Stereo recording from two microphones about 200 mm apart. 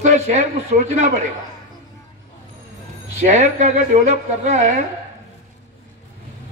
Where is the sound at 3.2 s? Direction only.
35° right (ahead or behind).